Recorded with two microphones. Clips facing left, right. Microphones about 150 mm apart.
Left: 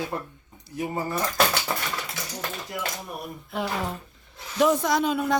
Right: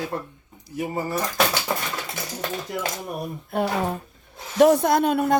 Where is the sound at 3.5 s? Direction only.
55° right (ahead or behind).